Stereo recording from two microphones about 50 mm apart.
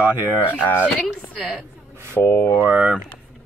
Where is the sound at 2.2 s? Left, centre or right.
Left.